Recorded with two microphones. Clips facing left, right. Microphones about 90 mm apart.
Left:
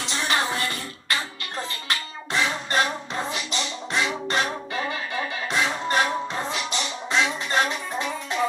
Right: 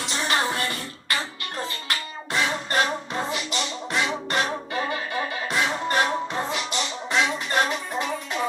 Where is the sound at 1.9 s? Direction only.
20° left (ahead or behind).